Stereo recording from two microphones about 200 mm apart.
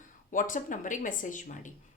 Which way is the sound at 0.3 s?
40° left (ahead or behind).